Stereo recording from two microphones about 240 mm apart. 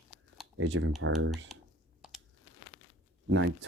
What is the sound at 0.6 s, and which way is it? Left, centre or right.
Speech, right.